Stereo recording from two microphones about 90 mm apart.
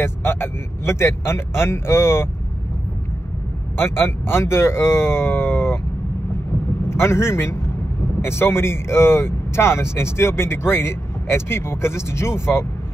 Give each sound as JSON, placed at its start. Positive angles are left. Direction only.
{"t": 0.0, "sound": "speech", "side_deg": 25}
{"t": 3.7, "sound": "speech", "side_deg": 25}
{"t": 6.9, "sound": "speech", "side_deg": 30}